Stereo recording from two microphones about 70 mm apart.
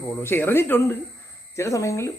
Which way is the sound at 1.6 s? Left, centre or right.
Left.